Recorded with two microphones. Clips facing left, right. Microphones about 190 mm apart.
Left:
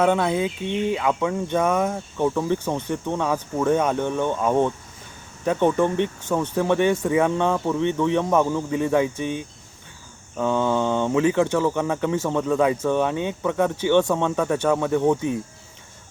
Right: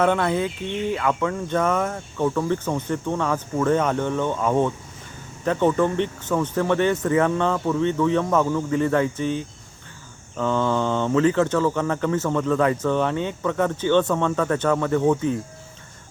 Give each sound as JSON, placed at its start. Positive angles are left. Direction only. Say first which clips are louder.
{"t": 0.0, "sound": "speech", "louder": "even", "side_deg": 10}